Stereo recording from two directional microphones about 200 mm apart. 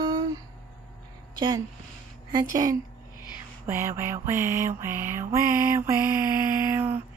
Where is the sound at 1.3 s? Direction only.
20° right (ahead or behind).